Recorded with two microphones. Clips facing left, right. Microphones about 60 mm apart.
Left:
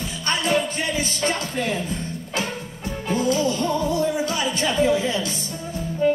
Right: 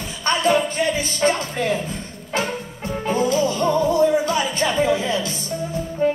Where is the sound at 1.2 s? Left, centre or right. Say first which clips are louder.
Right 6 dB; right.